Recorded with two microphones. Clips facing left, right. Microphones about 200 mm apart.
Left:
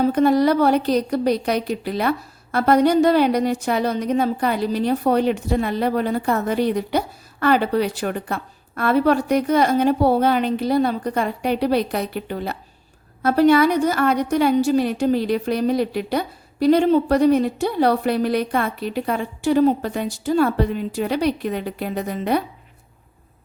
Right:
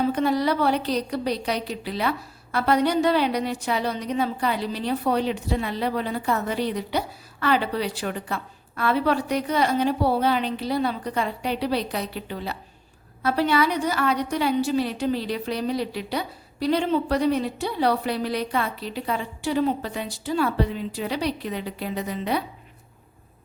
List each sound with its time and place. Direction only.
0.0 s a woman's voice: 45° left (ahead or behind)